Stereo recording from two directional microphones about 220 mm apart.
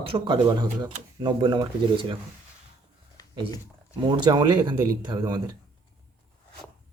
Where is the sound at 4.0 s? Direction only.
20° right (ahead or behind).